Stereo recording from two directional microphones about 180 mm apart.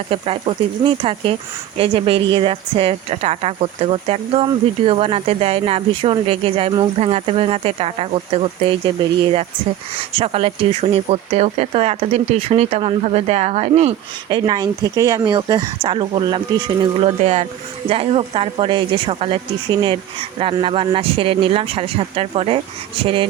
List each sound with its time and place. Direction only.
0.1 s speech: 30° right (ahead or behind)
10.1 s speech: 30° right (ahead or behind)